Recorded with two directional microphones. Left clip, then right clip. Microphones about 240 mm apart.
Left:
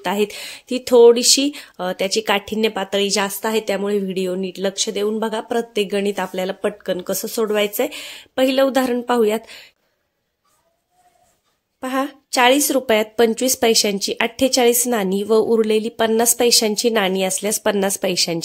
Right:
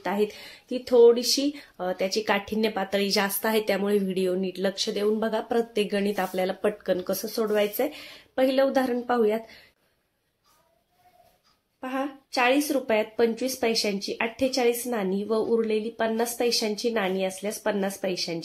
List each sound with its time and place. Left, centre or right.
0.0 s speech: left
11.8 s a woman's voice: left